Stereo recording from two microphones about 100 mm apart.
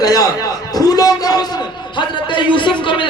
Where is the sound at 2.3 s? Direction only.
55° left (ahead or behind).